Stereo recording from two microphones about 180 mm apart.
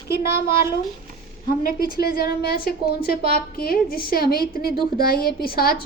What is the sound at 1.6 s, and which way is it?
A woman's voice, 55° left (ahead or behind).